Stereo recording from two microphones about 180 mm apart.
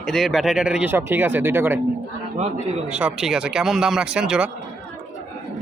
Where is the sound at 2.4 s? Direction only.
35° right (ahead or behind).